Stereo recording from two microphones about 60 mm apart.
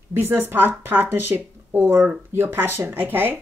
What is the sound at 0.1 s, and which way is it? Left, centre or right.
Speech, right.